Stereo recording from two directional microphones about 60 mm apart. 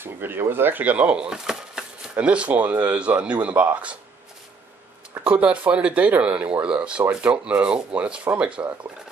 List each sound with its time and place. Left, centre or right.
0.0 s speech: right; by 1.9 s centre
2.1 s speech: right
5.2 s speech: right